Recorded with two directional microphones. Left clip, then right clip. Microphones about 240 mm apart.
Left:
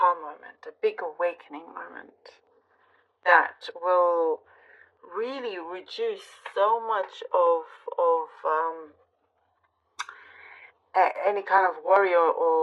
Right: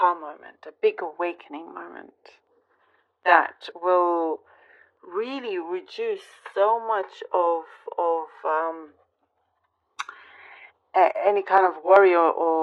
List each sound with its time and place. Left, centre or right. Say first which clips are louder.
0.0 s speech: right 1 dB; right
10.0 s speech: right 2 dB; right